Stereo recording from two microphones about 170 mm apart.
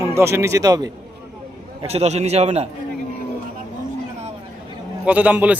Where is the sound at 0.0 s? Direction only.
15° right (ahead or behind).